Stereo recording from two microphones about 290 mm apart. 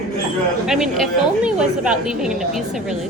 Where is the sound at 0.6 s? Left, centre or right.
Centre.